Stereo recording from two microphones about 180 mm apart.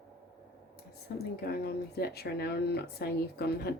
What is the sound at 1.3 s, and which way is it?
Speech, 60° left (ahead or behind).